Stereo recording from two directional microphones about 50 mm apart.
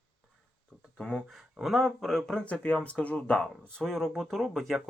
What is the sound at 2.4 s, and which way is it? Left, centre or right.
Speech, left.